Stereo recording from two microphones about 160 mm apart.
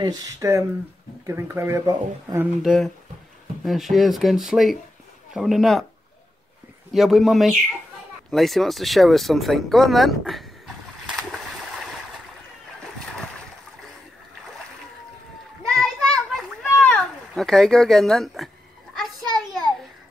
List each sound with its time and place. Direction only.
0.0 s speech: 20° right (ahead or behind)
2.6 s speech: centre (ahead or behind)
6.9 s speech: centre (ahead or behind)
11.1 s boat: centre (ahead or behind)
15.7 s children playing: 5° left (ahead or behind)
16.7 s a sound: 5° left (ahead or behind)